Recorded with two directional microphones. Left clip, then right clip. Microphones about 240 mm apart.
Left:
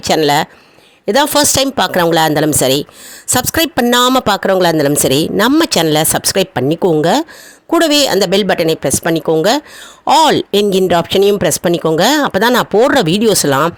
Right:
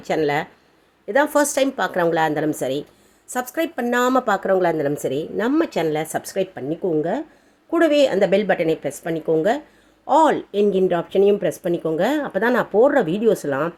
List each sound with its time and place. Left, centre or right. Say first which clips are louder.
0.0 s speech: left 9 dB; left